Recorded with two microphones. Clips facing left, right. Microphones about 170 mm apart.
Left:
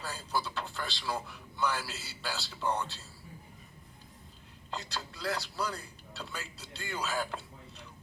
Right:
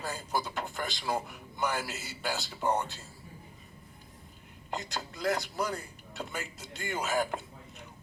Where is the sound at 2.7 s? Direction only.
15° right (ahead or behind).